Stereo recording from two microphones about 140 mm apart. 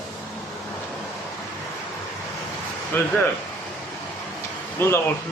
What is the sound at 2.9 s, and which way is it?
Speech, 15° left (ahead or behind).